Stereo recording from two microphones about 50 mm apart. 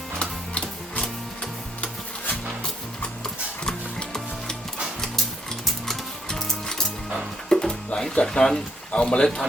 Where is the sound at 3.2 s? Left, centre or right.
Centre.